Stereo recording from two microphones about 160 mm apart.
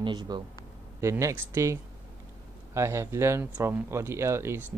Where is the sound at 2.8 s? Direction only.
15° right (ahead or behind).